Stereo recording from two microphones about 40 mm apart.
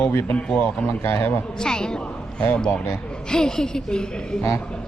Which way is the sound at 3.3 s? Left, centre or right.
Centre.